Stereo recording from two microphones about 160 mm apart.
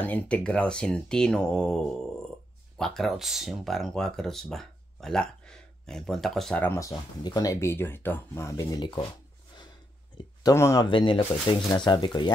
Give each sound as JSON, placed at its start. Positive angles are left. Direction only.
{"t": 0.0, "sound": "speech", "side_deg": 10}
{"t": 6.8, "sound": "speech", "side_deg": 20}
{"t": 10.1, "sound": "speech", "side_deg": 20}
{"t": 10.9, "sound": "speech", "side_deg": 35}